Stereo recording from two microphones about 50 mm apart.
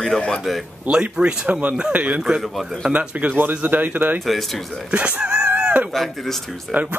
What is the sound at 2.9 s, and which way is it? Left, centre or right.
Speech, right.